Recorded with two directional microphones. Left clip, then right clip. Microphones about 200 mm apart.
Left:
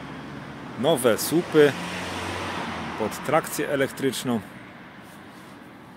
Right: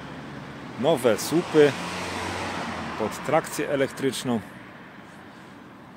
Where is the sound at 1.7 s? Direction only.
50° right (ahead or behind).